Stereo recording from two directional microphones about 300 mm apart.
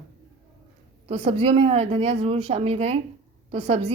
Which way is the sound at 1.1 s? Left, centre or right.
Centre.